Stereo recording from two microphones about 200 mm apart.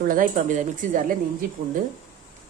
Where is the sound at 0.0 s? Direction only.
45° right (ahead or behind).